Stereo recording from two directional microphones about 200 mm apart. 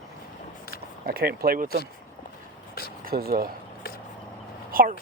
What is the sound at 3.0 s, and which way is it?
Speech, 50° right (ahead or behind).